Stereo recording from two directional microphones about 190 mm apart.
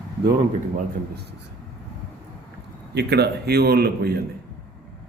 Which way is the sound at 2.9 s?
60° right (ahead or behind).